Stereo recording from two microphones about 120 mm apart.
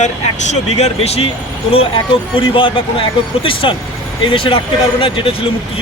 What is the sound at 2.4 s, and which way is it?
Speech, 45° left (ahead or behind).